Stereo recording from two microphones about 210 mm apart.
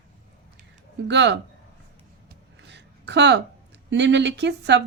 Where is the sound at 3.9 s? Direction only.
55° right (ahead or behind).